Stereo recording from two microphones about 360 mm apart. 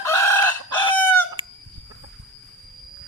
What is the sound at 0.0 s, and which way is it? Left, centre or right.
Chicken, centre.